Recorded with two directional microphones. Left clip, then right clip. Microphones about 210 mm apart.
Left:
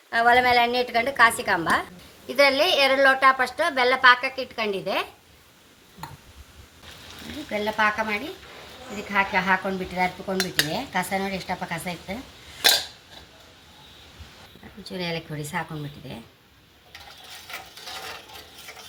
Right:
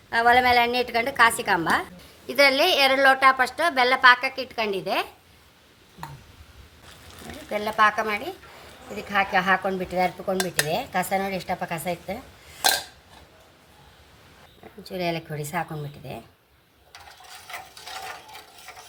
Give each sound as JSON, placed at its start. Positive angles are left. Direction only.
{"t": 0.1, "sound": "speech", "side_deg": -50}
{"t": 7.8, "sound": "speech", "side_deg": -50}
{"t": 14.8, "sound": "speech", "side_deg": -45}